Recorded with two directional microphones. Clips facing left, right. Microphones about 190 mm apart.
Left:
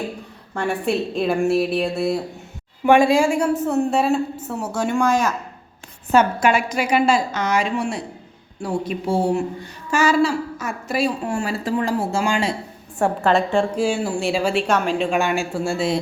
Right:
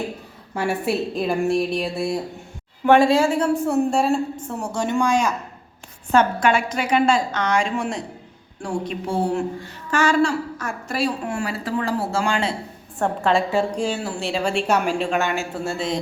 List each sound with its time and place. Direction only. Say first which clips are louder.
0.5 s a woman's voice: left 1 dB; 5° right (ahead or behind)
2.8 s a woman's voice: left 1 dB; 15° left (ahead or behind)
3.7 s a woman's voice: even; centre (ahead or behind)
6.1 s a woman's voice: left 1 dB; 10° left (ahead or behind)
11.3 s a woman's voice: left 3 dB; 25° left (ahead or behind); by 14.6 s 10° left (ahead or behind)
14.7 s speech: even; 10° right (ahead or behind)
15.0 s a woman's voice: left 2 dB; 10° left (ahead or behind)